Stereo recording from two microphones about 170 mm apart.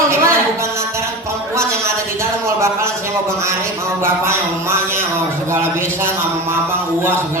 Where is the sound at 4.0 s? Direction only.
15° right (ahead or behind).